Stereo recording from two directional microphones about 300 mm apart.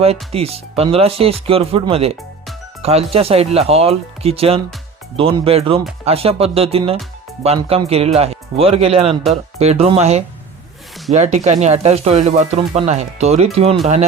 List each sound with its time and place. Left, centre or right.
0.0 s speech: centre